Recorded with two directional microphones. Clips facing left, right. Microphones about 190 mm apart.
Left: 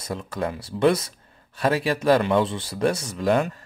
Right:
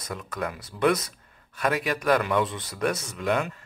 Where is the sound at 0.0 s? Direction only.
30° left (ahead or behind).